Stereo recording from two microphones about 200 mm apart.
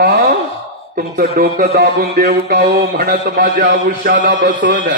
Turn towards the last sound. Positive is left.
turn(degrees=-40)  # may be behind; listen again after turning